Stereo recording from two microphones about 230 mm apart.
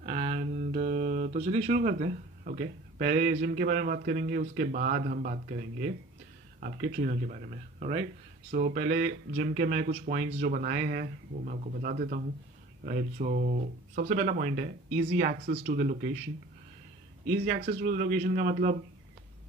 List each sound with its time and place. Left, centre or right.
0.0 s a sound: right
3.3 s speech: right
17.3 s speech: right